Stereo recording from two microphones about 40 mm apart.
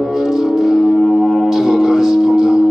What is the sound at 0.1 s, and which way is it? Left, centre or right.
Music, centre.